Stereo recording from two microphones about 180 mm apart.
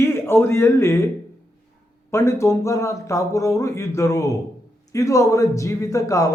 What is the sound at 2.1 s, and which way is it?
Speech, 15° left (ahead or behind).